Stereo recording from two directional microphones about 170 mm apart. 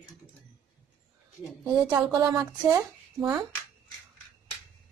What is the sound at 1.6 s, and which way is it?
A woman's voice, 25° right (ahead or behind).